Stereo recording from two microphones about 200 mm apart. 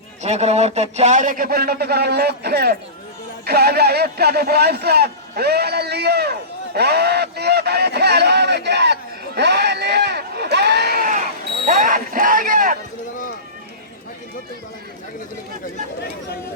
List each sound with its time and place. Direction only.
0.2 s a man's voice: 35° right (ahead or behind); by 6.3 s 55° right (ahead or behind)
6.7 s honk: 55° right (ahead or behind)
11.6 s a sound: 40° right (ahead or behind)